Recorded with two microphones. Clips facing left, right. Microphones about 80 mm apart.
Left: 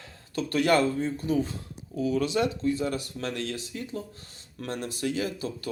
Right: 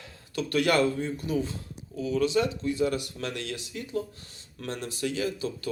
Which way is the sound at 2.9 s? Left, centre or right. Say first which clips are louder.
Even; left.